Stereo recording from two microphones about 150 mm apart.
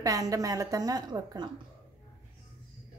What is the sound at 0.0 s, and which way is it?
A woman's voice, 25° right (ahead or behind).